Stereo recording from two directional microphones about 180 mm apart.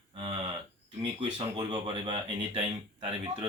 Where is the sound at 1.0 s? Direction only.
30° right (ahead or behind).